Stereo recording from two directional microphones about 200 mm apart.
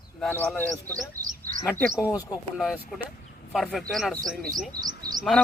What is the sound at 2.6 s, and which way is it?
Speech, centre (ahead or behind).